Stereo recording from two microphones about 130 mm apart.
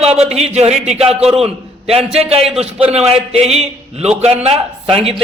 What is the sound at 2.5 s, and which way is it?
A man's voice, 50° right (ahead or behind).